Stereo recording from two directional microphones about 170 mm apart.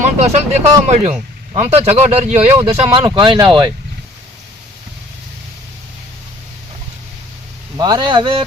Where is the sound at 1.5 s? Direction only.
35° right (ahead or behind).